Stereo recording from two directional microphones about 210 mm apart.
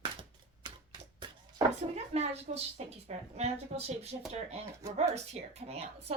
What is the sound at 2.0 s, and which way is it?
A woman's voice, 30° right (ahead or behind).